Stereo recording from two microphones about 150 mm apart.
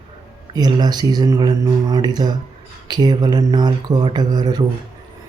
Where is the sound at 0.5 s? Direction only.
30° right (ahead or behind).